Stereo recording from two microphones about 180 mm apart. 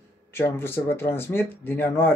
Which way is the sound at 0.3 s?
15° left (ahead or behind).